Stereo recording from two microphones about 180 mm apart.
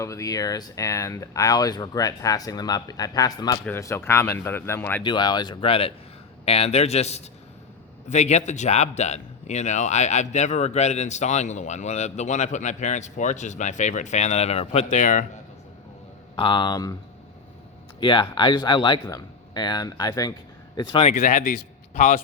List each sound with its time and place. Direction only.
0.0 s speech: 15° left (ahead or behind)
5.0 s a man's voice: 25° left (ahead or behind); by 15.3 s 45° left (ahead or behind)
16.3 s speech: 25° left (ahead or behind)
18.0 s speech: 30° left (ahead or behind)
21.0 s speech: 40° left (ahead or behind)